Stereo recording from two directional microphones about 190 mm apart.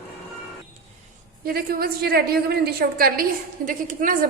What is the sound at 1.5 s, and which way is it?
A woman's voice, 55° right (ahead or behind).